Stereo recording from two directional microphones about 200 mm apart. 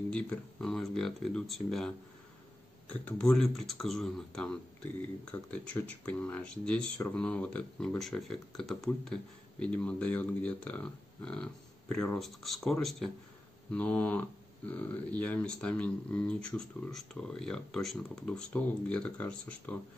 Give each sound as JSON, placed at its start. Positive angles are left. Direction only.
{"t": 0.1, "sound": "speech", "side_deg": 5}